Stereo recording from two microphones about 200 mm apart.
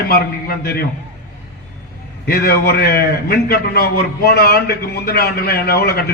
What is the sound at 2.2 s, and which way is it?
A man's voice, 50° left (ahead or behind).